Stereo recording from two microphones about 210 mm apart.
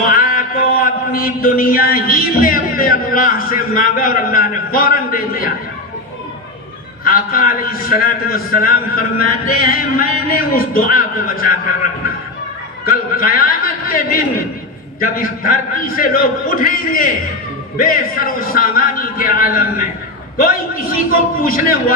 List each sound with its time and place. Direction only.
0.2 s mantra: 40° left (ahead or behind)
7.0 s mantra: 45° left (ahead or behind)
12.8 s mantra: 45° left (ahead or behind)